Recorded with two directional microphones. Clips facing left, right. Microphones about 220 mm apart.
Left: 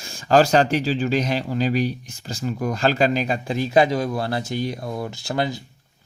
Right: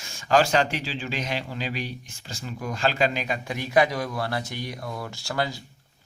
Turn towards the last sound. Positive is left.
turn(degrees=20)  # may be behind; listen again after turning